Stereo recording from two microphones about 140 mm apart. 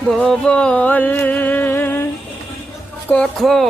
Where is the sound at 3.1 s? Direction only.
Centre (ahead or behind).